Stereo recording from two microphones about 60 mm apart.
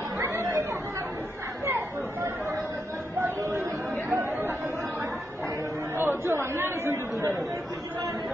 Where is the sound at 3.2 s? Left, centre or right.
Right.